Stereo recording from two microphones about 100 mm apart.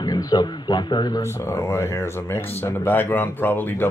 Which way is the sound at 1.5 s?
25° left (ahead or behind).